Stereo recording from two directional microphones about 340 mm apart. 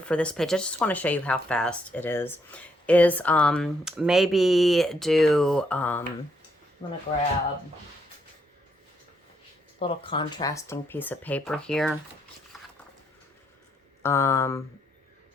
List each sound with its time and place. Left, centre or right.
0.0 s speech: centre
6.8 s speech: centre
9.7 s speech: centre
14.0 s speech: centre